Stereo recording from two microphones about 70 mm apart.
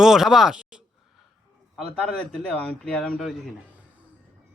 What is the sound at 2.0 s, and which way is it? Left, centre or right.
Speech, centre.